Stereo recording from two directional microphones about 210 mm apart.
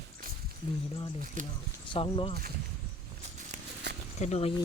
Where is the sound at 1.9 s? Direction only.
25° left (ahead or behind).